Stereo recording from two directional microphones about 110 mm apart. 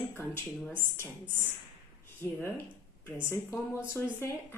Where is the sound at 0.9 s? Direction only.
20° left (ahead or behind).